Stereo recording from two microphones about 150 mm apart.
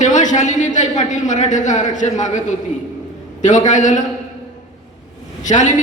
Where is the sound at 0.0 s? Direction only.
55° left (ahead or behind).